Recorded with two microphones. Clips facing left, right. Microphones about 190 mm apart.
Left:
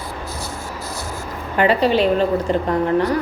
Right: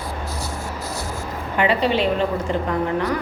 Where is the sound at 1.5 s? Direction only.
40° left (ahead or behind).